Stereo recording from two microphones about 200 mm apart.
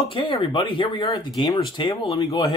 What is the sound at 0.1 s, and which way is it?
Speech, 25° left (ahead or behind).